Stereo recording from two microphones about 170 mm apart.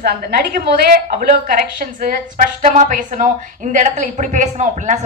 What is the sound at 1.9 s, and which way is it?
A woman's voice, 50° right (ahead or behind).